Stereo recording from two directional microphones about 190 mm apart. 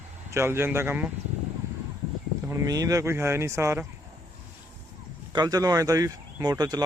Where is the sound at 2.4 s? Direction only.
15° right (ahead or behind).